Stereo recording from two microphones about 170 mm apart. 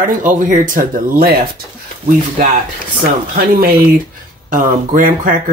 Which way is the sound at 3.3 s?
60° right (ahead or behind).